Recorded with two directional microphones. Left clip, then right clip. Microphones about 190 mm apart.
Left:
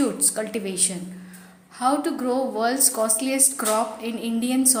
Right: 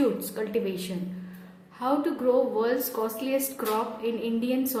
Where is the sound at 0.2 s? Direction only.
15° left (ahead or behind).